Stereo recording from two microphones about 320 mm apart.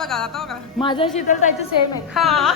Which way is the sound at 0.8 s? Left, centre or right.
Centre.